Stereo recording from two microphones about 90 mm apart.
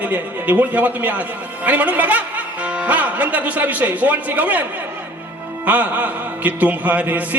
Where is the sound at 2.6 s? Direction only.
15° right (ahead or behind).